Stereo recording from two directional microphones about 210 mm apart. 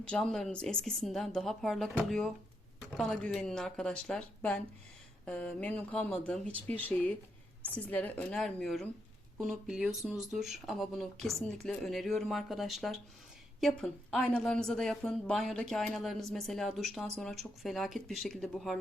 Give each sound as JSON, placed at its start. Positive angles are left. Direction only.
{"t": 0.0, "sound": "a woman's voice", "side_deg": 5}